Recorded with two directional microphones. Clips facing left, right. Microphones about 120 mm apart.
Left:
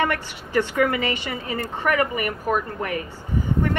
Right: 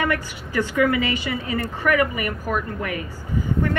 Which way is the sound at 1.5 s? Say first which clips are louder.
Right 1 dB; 30° left (ahead or behind).